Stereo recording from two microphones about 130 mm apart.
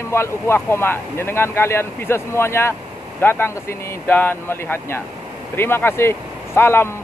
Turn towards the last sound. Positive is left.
turn(degrees=20)  # may be behind; listen again after turning